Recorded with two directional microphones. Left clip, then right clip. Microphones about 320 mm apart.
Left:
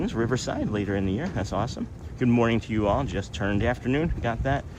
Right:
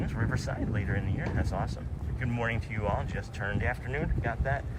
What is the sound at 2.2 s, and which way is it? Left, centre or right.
Speech, centre.